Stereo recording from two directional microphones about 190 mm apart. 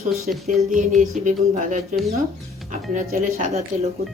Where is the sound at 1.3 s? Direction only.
40° right (ahead or behind).